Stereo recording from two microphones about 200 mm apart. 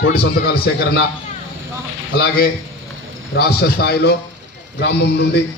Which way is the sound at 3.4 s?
55° left (ahead or behind).